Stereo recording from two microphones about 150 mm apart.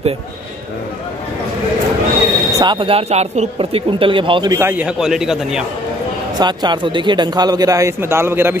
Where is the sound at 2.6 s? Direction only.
35° right (ahead or behind).